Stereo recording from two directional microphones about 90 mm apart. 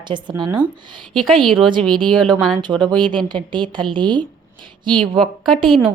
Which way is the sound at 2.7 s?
30° right (ahead or behind).